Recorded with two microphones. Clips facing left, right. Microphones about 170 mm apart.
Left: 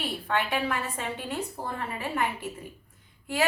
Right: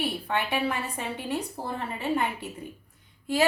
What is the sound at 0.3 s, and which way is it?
A woman's voice, 15° right (ahead or behind).